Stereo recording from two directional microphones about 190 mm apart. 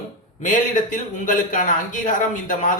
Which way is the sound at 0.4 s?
40° left (ahead or behind).